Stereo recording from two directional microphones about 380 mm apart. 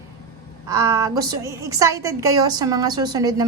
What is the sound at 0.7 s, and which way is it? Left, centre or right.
A woman's voice, centre.